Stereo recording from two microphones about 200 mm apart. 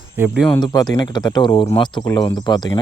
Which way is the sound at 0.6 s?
20° left (ahead or behind).